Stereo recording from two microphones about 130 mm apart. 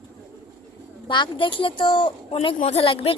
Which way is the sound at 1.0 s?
40° left (ahead or behind).